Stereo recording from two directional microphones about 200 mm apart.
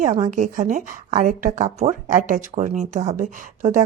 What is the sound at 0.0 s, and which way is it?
A woman's voice, 40° right (ahead or behind).